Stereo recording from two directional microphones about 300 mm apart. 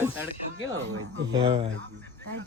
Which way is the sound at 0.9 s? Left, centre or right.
Right.